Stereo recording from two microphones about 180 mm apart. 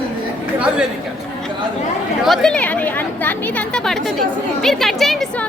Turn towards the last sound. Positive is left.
turn(degrees=0)  # may be behind; listen again after turning